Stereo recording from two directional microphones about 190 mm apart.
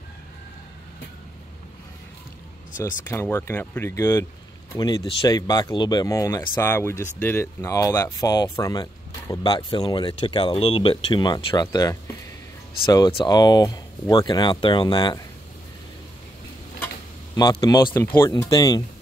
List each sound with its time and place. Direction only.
3.1 s speech: 10° left (ahead or behind)
17.4 s speech: 20° left (ahead or behind)